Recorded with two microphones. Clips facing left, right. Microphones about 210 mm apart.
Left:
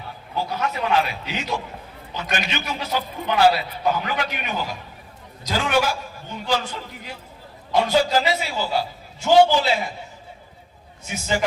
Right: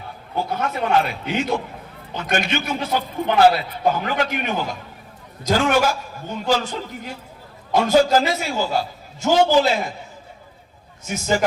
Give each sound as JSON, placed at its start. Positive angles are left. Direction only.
{"t": 0.3, "sound": "a man's voice", "side_deg": -55}
{"t": 11.0, "sound": "a man's voice", "side_deg": -40}